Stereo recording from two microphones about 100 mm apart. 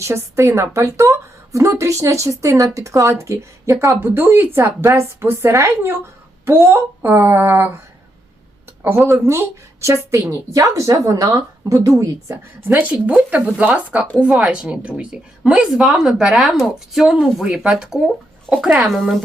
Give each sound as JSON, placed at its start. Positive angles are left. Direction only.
{"t": 0.0, "sound": "a woman's voice", "side_deg": -30}
{"t": 9.0, "sound": "a woman's voice", "side_deg": -25}
{"t": 12.3, "sound": "a woman's voice", "side_deg": -20}